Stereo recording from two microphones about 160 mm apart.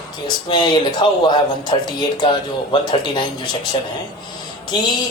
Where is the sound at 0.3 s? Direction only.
30° left (ahead or behind).